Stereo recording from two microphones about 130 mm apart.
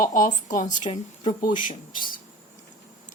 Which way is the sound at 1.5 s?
85° left.